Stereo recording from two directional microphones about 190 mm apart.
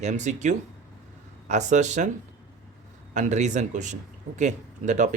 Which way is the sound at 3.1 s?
40° right (ahead or behind).